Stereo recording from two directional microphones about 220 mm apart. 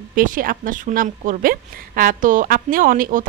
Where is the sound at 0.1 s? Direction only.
40° right (ahead or behind).